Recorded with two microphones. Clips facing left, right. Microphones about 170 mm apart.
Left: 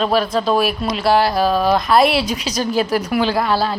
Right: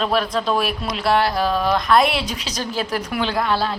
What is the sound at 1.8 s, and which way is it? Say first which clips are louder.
A woman's voice: left 3 dB; 5° left (ahead or behind).